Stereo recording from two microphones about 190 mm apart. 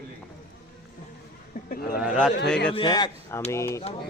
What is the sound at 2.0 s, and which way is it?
Speech, 5° right (ahead or behind).